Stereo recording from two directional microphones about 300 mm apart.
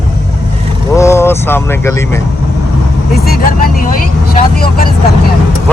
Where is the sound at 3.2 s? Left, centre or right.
Left.